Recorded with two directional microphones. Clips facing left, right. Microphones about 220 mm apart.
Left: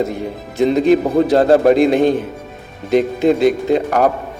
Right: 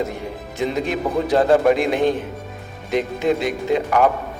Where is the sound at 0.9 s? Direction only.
35° left (ahead or behind).